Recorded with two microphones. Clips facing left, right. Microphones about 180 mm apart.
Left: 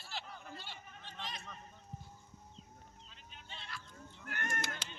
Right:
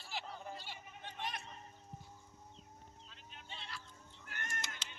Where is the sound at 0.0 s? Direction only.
15° right (ahead or behind).